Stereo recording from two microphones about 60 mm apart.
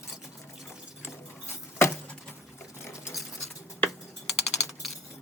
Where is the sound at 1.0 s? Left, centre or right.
Left.